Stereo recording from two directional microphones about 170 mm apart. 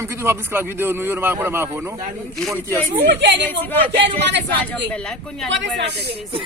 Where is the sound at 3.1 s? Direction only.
90° right.